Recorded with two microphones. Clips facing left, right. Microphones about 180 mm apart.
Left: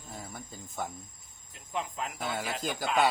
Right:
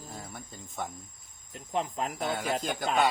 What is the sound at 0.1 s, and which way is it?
Speech, centre (ahead or behind).